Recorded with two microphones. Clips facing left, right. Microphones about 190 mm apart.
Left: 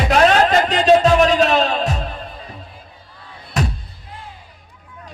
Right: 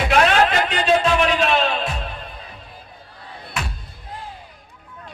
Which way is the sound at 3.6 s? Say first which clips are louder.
Left 8 dB; 40° left (ahead or behind).